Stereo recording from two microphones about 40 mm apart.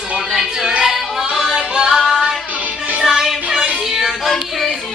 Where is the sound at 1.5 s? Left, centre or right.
Centre.